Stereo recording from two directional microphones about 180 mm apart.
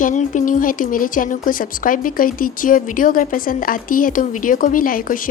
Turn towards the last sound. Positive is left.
turn(degrees=50)  # may be behind; listen again after turning